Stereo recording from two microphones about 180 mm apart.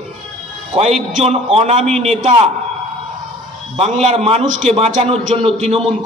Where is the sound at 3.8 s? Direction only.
35° right (ahead or behind).